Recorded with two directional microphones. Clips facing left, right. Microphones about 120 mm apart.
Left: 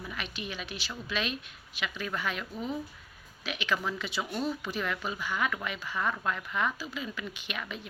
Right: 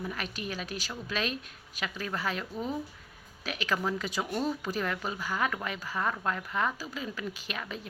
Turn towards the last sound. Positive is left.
turn(degrees=-35)  # may be behind; listen again after turning